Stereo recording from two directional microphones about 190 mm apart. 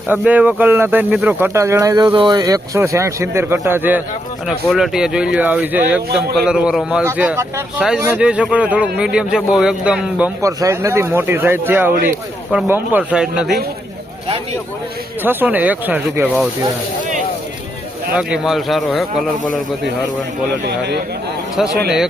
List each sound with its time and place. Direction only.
0.1 s speech: 10° right (ahead or behind)
15.2 s speech: 10° right (ahead or behind)
18.1 s speech: 5° right (ahead or behind)
20.7 s a man's voice: 60° right (ahead or behind)
21.6 s speech: 5° right (ahead or behind)